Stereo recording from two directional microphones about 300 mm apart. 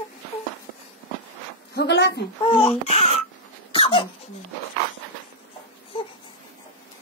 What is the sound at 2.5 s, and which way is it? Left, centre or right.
Speech, centre.